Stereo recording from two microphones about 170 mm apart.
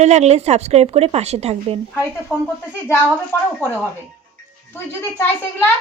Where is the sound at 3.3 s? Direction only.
10° left (ahead or behind).